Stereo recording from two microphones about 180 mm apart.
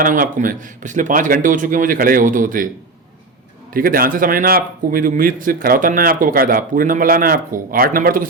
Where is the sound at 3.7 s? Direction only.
50° right (ahead or behind).